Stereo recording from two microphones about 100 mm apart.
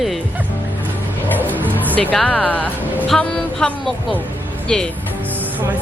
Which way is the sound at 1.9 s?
10° left (ahead or behind).